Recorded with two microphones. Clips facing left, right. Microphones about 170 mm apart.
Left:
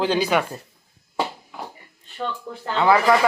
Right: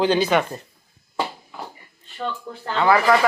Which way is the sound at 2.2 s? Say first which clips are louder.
Even; 5° left (ahead or behind).